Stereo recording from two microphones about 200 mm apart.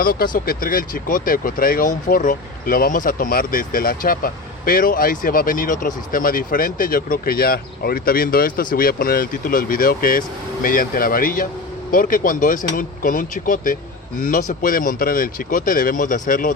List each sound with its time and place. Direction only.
0.0 s speech: 45° left (ahead or behind)